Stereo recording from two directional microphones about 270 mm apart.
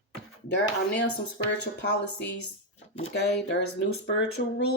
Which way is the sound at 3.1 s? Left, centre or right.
Left.